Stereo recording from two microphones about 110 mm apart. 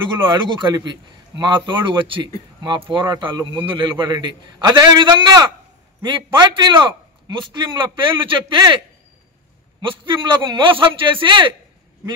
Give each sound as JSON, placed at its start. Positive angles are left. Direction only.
{"t": 0.0, "sound": "a man's voice", "side_deg": -45}